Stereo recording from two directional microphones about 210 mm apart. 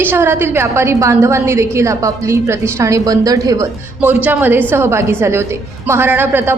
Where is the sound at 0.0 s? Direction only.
10° right (ahead or behind).